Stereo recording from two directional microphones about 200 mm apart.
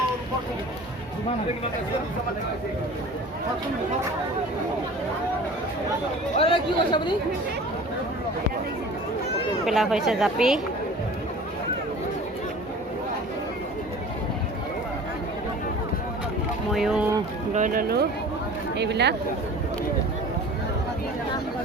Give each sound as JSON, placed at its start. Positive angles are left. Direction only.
{"t": 6.3, "sound": "speech", "side_deg": 30}
{"t": 9.6, "sound": "speech", "side_deg": 0}
{"t": 16.7, "sound": "speech", "side_deg": 0}
{"t": 17.5, "sound": "speech", "side_deg": -40}
{"t": 18.8, "sound": "speech", "side_deg": -60}